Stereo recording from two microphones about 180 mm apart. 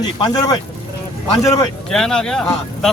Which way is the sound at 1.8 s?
5° left (ahead or behind).